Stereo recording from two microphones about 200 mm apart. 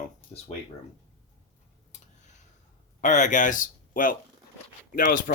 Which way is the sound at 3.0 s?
40° left (ahead or behind).